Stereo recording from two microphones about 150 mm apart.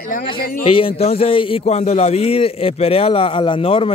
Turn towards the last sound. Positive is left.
turn(degrees=40)  # may be behind; listen again after turning